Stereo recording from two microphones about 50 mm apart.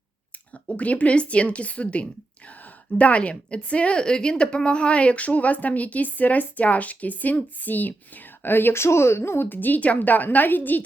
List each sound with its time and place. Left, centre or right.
0.8 s speech: left
2.5 s a sound: left
3.0 s a woman's voice: left
9.5 s a woman's voice: left